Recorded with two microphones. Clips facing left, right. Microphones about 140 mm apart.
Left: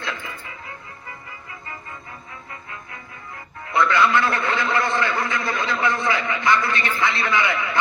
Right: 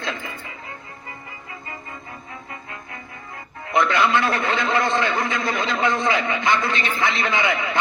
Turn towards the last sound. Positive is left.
turn(degrees=-20)  # may be behind; listen again after turning